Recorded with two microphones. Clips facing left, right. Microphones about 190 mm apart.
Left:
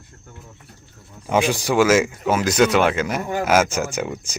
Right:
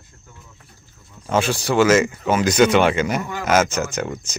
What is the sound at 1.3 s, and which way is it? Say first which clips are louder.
Speech: left 1 dB; 15° left (ahead or behind).